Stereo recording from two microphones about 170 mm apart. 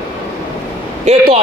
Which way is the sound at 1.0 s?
40° right (ahead or behind).